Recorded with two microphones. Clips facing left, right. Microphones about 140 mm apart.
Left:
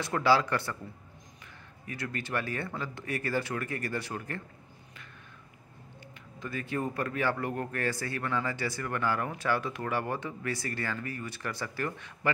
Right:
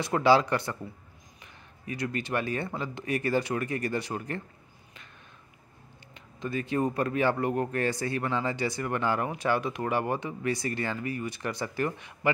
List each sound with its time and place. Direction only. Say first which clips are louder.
0.0 s speech: right 3 dB; 20° right (ahead or behind)
1.9 s speech: right 4 dB; 20° right (ahead or behind)
6.4 s speech: right 5 dB; 20° right (ahead or behind)